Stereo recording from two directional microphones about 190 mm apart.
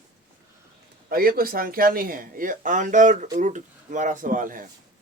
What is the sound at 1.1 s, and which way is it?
Speech, 50° right (ahead or behind).